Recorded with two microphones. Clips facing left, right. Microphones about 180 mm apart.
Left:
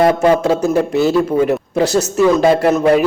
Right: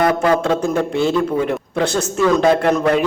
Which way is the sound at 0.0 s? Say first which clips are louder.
Left 4 dB; 25° left (ahead or behind).